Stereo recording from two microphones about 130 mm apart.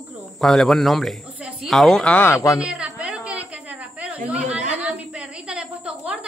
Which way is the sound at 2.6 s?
5° right (ahead or behind).